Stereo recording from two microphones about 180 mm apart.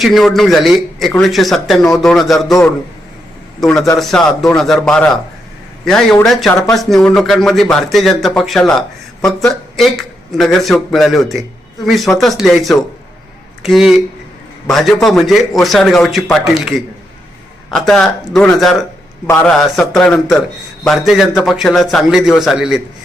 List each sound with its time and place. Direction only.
0.0 s speech: centre (ahead or behind)